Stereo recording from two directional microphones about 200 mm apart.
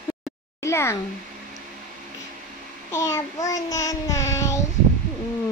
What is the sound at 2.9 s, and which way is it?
Child singing, 15° left (ahead or behind).